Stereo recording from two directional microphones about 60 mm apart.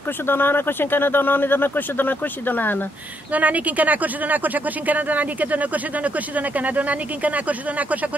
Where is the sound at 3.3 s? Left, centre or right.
Right.